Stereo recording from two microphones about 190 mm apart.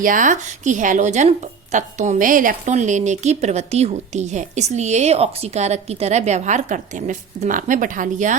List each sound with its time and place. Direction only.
0.0 s speech: 45° right (ahead or behind)